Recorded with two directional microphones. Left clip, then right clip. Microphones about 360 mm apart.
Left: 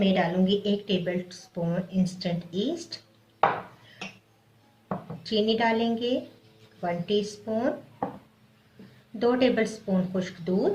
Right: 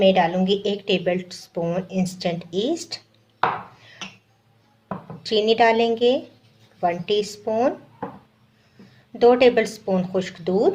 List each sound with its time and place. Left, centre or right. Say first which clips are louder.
0.0 s a woman's voice: right 8 dB; right
5.2 s a woman's voice: right 8 dB; right
9.1 s a woman's voice: right 9 dB; right